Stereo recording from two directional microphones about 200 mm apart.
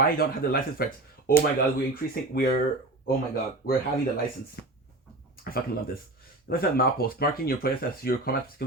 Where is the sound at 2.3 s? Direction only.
50° left (ahead or behind).